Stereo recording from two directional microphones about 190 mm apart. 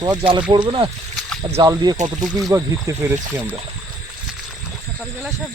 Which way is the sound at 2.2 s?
Centre (ahead or behind).